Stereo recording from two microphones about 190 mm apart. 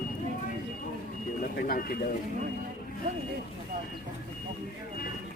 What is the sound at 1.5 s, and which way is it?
Speech, 50° left (ahead or behind).